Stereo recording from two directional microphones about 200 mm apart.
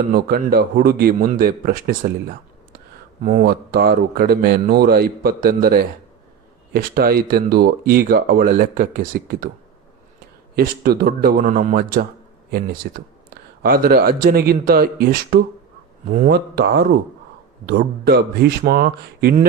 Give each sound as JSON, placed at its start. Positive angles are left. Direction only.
{"t": 0.1, "sound": "speech", "side_deg": -50}
{"t": 3.2, "sound": "speech", "side_deg": -45}
{"t": 10.5, "sound": "speech", "side_deg": -50}